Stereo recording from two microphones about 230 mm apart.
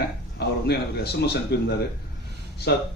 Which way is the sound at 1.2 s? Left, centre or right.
Left.